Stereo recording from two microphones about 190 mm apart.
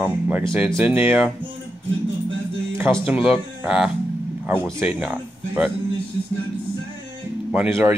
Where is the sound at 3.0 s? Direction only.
10° right (ahead or behind).